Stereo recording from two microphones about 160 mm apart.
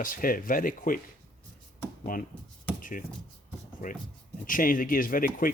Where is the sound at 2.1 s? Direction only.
60° left (ahead or behind).